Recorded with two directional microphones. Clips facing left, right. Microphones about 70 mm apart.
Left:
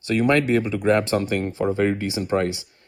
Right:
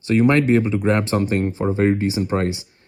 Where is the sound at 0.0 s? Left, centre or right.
Right.